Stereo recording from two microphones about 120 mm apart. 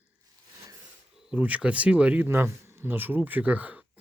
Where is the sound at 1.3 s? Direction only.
10° right (ahead or behind).